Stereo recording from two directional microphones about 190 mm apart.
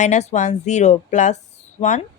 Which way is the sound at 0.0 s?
35° left (ahead or behind).